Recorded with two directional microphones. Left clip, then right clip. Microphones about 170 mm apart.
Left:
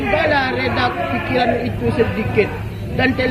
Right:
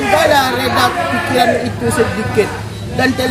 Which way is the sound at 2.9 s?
20° right (ahead or behind).